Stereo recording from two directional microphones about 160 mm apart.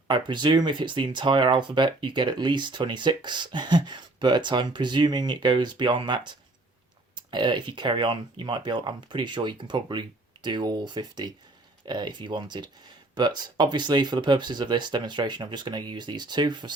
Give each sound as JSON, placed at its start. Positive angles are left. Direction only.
{"t": 0.1, "sound": "speech", "side_deg": -30}